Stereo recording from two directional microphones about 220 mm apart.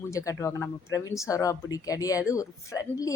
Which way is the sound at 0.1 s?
15° left (ahead or behind).